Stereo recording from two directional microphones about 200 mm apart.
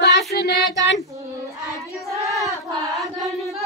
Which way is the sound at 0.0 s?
55° left (ahead or behind).